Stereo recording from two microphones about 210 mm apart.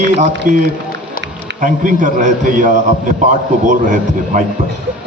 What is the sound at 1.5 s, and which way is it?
A man's voice, 40° right (ahead or behind).